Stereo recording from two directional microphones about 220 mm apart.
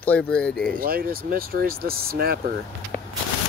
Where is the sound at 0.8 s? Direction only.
40° right (ahead or behind).